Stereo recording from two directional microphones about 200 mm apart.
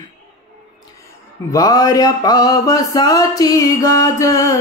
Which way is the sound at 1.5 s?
20° left (ahead or behind).